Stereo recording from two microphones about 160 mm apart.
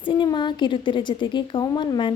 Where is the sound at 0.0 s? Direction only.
30° left (ahead or behind).